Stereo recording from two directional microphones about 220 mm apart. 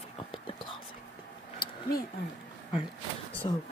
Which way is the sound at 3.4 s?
20° left (ahead or behind).